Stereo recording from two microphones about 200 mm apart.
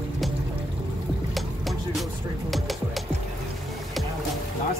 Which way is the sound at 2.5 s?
Centre (ahead or behind).